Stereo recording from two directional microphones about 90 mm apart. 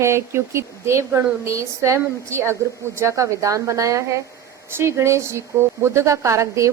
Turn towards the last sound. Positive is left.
turn(degrees=-35)  # may be behind; listen again after turning